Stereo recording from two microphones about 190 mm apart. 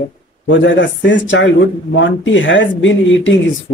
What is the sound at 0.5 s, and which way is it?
Speech, 70° left (ahead or behind).